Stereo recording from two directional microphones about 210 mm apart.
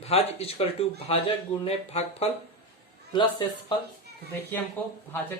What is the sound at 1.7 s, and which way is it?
A man's voice, 30° left (ahead or behind).